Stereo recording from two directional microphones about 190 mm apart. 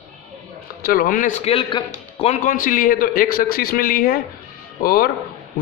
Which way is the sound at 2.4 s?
45° left (ahead or behind).